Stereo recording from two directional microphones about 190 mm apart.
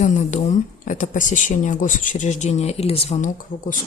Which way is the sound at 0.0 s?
35° left (ahead or behind).